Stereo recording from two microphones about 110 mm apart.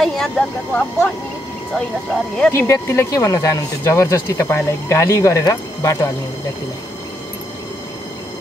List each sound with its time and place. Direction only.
0.0 s speech: 5° left (ahead or behind)
2.5 s speech: 25° left (ahead or behind)